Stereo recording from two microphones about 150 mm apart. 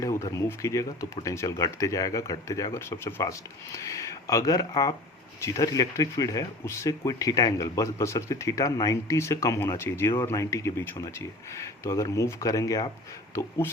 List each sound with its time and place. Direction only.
0.0 s speech: 20° left (ahead or behind)